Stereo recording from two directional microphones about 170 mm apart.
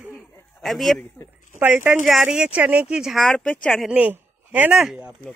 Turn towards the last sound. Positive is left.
turn(degrees=-5)  # may be behind; listen again after turning